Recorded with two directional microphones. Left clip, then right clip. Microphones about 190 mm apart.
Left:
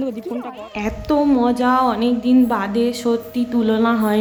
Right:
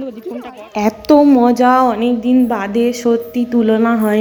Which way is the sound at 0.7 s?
20° right (ahead or behind).